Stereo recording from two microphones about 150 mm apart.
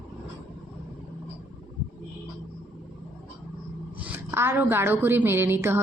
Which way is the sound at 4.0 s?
15° right (ahead or behind).